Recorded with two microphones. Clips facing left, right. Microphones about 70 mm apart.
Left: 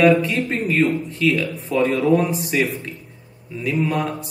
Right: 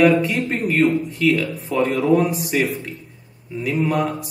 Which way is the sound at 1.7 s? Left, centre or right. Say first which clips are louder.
Even; centre.